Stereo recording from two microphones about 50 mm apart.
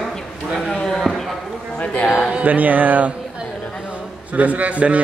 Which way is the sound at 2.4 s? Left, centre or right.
Right.